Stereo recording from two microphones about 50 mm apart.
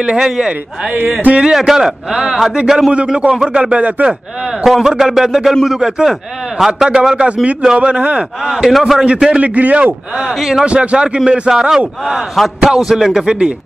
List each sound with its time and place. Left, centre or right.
0.0 s speech: centre
0.9 s speech: right
1.4 s a man's voice: centre
4.6 s a man's voice: centre; by 8.3 s right
8.6 s a man's voice: centre
9.0 s speech: right
10.1 s a man's voice: centre
10.6 s a man's voice: right
12.0 s a man's voice: centre